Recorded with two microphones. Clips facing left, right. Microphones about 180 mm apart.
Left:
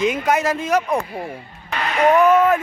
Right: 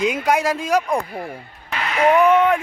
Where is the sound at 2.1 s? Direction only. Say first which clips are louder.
Left 1 dB; 5° left (ahead or behind).